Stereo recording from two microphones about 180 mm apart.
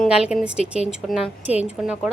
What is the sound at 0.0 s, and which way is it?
A woman's voice, 5° right (ahead or behind).